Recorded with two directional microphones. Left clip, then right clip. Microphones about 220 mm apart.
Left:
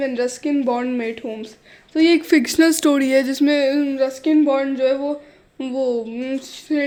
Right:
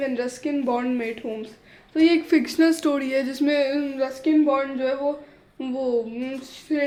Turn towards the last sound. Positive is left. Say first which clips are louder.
# left 3 dB
turn(degrees=40)  # may be behind; listen again after turning